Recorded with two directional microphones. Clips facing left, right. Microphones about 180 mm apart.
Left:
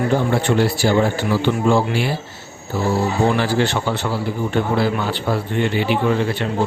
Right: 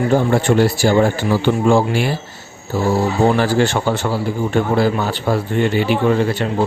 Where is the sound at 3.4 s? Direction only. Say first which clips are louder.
Right 3 dB; 45° right (ahead or behind).